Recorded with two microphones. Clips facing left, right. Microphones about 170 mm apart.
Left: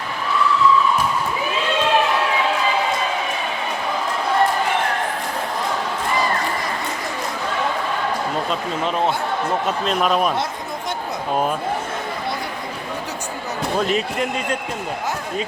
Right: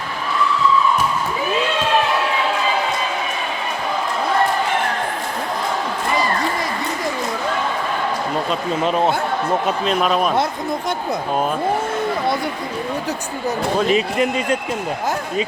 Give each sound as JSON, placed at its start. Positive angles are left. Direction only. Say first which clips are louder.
{"t": 9.8, "sound": "speech", "louder": "left 1 dB", "side_deg": 0}
{"t": 13.7, "sound": "speech", "louder": "right 3 dB", "side_deg": -5}